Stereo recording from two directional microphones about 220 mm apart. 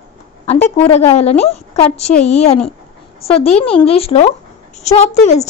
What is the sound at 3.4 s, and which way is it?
A woman's voice, 25° left (ahead or behind).